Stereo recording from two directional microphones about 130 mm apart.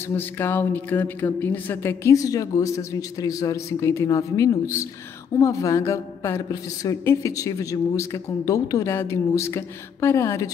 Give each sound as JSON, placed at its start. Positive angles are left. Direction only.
{"t": 0.1, "sound": "a woman's voice", "side_deg": 15}